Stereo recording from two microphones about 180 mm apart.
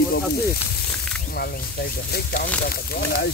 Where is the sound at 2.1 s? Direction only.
60° left (ahead or behind).